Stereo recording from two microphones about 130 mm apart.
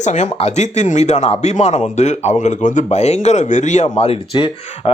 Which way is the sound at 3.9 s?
50° left (ahead or behind).